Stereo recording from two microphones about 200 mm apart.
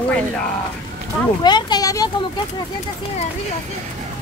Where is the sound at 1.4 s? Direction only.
20° left (ahead or behind).